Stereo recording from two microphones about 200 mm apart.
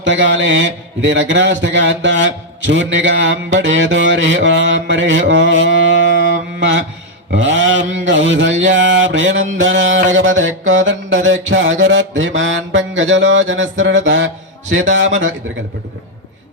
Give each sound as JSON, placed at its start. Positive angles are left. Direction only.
{"t": 0.0, "sound": "a man's voice", "side_deg": -65}
{"t": 6.6, "sound": "mantra", "side_deg": -65}
{"t": 7.3, "sound": "a man's voice", "side_deg": -70}